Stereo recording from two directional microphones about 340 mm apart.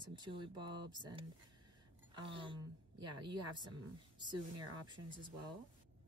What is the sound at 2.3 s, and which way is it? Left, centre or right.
Speech, centre.